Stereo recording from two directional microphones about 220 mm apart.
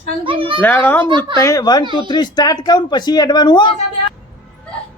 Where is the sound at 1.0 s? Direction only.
20° right (ahead or behind).